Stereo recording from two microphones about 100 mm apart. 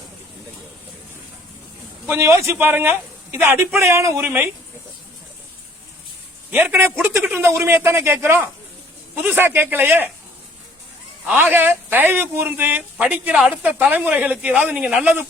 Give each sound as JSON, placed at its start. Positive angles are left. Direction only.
{"t": 2.0, "sound": "speech", "side_deg": -25}
{"t": 6.5, "sound": "speech", "side_deg": -20}
{"t": 11.3, "sound": "a man's voice", "side_deg": -20}